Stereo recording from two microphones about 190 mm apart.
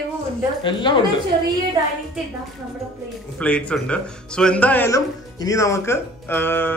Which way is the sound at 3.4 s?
5° left (ahead or behind).